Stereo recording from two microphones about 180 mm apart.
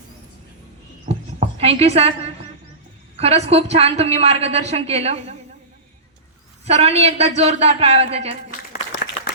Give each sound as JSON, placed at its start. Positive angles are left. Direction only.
{"t": 1.1, "sound": "heart sounds", "side_deg": -50}
{"t": 1.5, "sound": "a woman's voice", "side_deg": -35}
{"t": 6.7, "sound": "a woman's voice", "side_deg": -35}
{"t": 8.7, "sound": "applause", "side_deg": 55}